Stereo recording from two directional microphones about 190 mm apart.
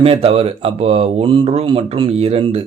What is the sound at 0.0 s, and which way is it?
A man's voice, 30° right (ahead or behind).